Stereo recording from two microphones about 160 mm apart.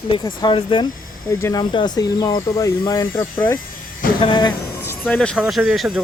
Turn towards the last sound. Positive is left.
turn(degrees=0)  # may be behind; listen again after turning